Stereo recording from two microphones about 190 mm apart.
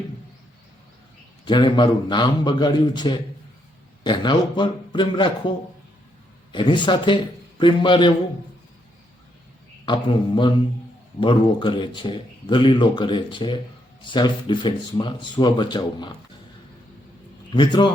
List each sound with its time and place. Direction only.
1.5 s speech: 25° left (ahead or behind)
6.5 s speech: 25° left (ahead or behind)
9.8 s speech: 25° left (ahead or behind)
17.5 s speech: 25° left (ahead or behind)